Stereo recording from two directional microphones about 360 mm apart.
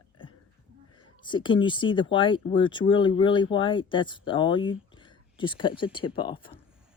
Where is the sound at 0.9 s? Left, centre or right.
Centre.